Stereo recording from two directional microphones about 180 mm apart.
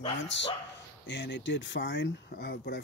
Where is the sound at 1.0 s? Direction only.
75° left (ahead or behind).